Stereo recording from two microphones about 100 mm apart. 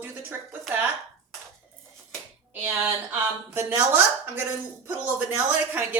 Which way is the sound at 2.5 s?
15° right (ahead or behind).